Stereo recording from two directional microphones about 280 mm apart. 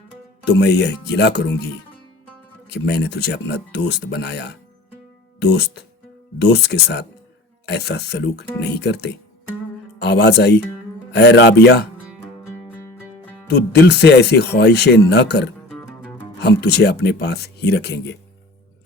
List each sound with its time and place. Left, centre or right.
0.4 s speech: left
2.6 s speech: left
13.5 s speech: left